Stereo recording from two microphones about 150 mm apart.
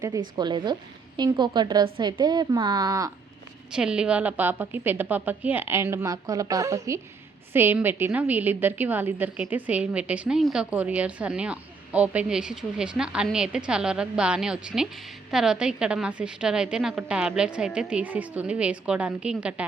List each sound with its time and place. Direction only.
0.0 s a woman's voice: 25° right (ahead or behind)
3.7 s a woman's voice: 5° right (ahead or behind)